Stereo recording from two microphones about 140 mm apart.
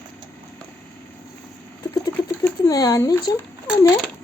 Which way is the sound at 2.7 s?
25° left (ahead or behind).